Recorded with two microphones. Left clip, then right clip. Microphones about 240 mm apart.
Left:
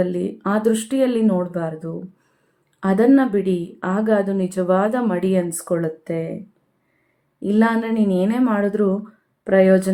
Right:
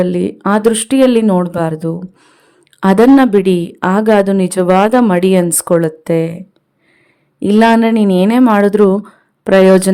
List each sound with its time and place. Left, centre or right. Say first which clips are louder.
0.0 s a woman's voice: right 7 dB; right
7.3 s a woman's voice: right 10 dB; right